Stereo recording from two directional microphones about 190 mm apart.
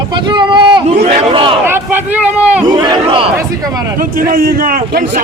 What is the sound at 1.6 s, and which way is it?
Speech, 10° right (ahead or behind).